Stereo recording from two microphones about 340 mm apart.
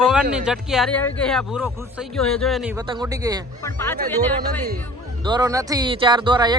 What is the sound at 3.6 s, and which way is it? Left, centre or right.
Speech, centre.